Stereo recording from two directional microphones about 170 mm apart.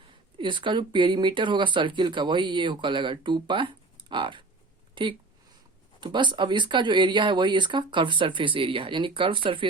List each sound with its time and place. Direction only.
0.3 s speech: 30° right (ahead or behind)